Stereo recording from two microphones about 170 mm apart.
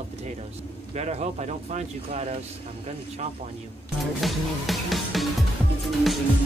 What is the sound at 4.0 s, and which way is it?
Music, centre (ahead or behind).